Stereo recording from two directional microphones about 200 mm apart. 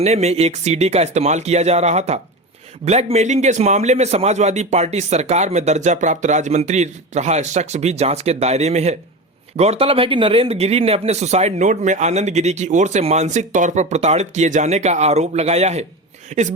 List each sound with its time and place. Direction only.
0.0 s speech: 35° right (ahead or behind)